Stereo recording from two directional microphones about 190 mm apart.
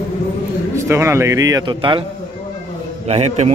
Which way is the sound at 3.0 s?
35° right (ahead or behind).